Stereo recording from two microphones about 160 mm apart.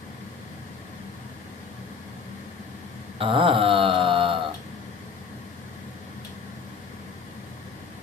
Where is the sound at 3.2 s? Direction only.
35° right (ahead or behind).